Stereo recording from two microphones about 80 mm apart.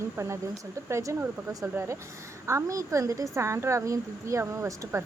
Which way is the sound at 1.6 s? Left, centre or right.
Right.